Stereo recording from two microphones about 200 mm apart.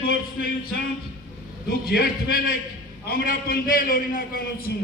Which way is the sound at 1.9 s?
50° left (ahead or behind).